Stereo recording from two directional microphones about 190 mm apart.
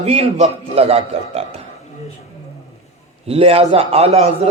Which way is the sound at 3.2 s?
30° right (ahead or behind).